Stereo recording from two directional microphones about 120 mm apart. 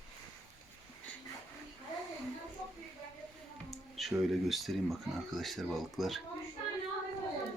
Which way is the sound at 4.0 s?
Centre (ahead or behind).